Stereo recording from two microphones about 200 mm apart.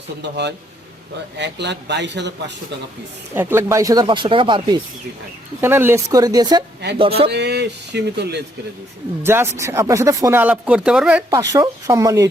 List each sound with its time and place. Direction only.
0.2 s speech: 60° right (ahead or behind)
3.3 s speech: 15° right (ahead or behind)
5.5 s speech: 10° right (ahead or behind); by 7.3 s 30° right (ahead or behind)
7.3 s speech: 55° right (ahead or behind)
9.2 s speech: 10° right (ahead or behind)
11.3 s speech: 15° right (ahead or behind)